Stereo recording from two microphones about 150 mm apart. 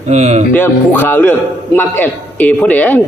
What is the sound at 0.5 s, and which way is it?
A man's voice, 10° left (ahead or behind).